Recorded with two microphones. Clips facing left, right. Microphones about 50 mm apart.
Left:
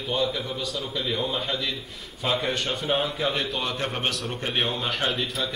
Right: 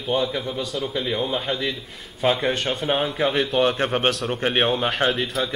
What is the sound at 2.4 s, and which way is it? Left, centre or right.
A man's voice, right.